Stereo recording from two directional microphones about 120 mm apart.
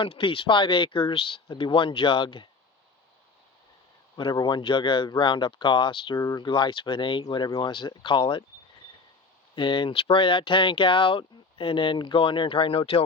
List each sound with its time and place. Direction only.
0.0 s speech: 45° left (ahead or behind)
4.2 s speech: 40° left (ahead or behind)
9.6 s speech: 45° left (ahead or behind)